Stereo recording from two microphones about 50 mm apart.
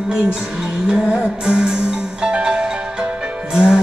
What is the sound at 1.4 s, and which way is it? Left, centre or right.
Music, centre.